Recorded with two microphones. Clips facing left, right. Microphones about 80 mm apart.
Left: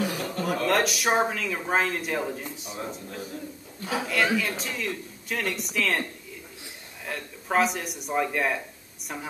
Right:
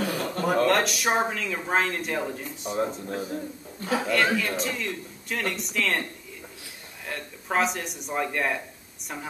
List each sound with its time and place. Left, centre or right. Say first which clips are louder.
0.2 s chuckle: right 4 dB; right
0.7 s speech: even; centre
3.1 s a man's voice: right 6 dB; right
3.8 s speech: right 2 dB; centre
7.1 s speech: left 1 dB; centre